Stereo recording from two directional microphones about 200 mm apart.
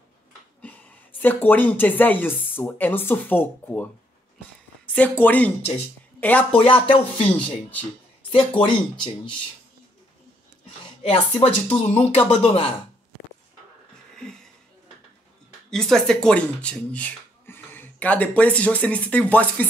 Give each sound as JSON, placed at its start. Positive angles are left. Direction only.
{"t": 1.2, "sound": "speech", "side_deg": 10}
{"t": 5.2, "sound": "speech", "side_deg": 10}
{"t": 6.6, "sound": "speech", "side_deg": 25}
{"t": 7.3, "sound": "speech", "side_deg": 5}
{"t": 8.3, "sound": "speech", "side_deg": 25}
{"t": 11.0, "sound": "speech", "side_deg": 30}
{"t": 14.2, "sound": "a sound", "side_deg": 5}
{"t": 15.7, "sound": "speech", "side_deg": 0}